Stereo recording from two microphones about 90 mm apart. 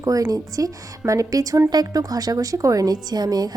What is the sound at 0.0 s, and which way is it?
A woman's voice, 40° right (ahead or behind).